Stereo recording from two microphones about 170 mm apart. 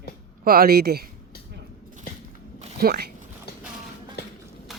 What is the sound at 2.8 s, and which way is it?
Speech, 65° right (ahead or behind).